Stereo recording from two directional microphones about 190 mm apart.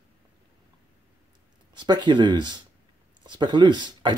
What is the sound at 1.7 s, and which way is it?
Speech, 25° right (ahead or behind).